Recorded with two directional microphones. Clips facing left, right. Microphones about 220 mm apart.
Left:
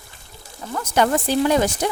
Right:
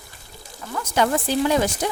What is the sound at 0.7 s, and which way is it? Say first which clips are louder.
Speech: left 2 dB; 50° left (ahead or behind).